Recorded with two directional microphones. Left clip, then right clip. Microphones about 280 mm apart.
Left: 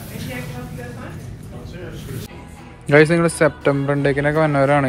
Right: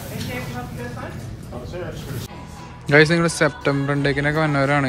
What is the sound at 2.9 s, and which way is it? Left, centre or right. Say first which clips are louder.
A man's voice: left 2 dB; centre.